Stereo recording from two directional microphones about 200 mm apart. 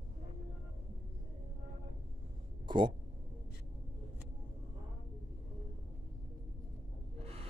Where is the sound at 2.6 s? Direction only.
25° right (ahead or behind).